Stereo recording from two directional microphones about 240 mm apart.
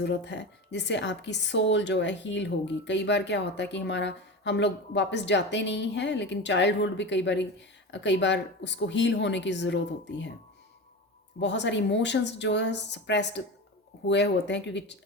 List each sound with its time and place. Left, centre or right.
0.0 s a woman's voice: left
11.3 s a woman's voice: left